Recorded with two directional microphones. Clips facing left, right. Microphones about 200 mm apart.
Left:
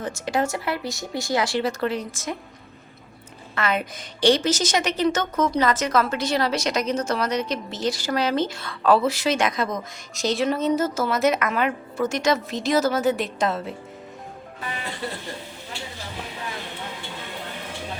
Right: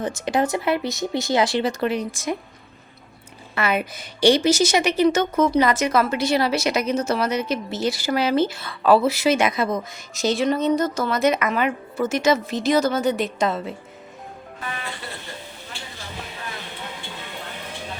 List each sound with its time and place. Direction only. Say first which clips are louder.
0.0 s speech: right 3 dB; 20° right (ahead or behind)
3.5 s a woman's voice: right 2 dB; 10° right (ahead or behind)